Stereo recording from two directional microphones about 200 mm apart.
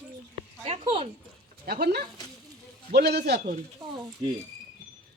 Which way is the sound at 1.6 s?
50° right (ahead or behind).